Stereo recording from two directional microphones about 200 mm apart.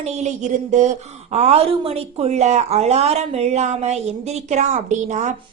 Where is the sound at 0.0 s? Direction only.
35° right (ahead or behind).